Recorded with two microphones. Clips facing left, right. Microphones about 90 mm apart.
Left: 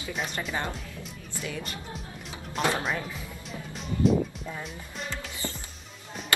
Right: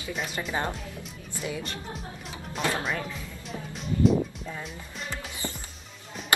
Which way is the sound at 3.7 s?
Centre (ahead or behind).